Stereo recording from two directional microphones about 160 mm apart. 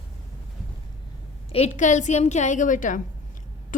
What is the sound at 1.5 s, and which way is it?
A woman's voice, 45° left (ahead or behind).